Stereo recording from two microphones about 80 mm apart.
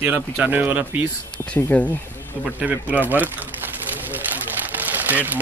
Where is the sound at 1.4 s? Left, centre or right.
Left.